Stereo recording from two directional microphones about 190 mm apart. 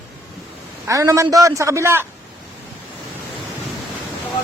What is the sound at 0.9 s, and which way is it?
A man's voice, 15° right (ahead or behind).